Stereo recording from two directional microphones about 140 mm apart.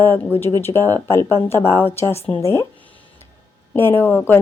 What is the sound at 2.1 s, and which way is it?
Speech, 45° left (ahead or behind).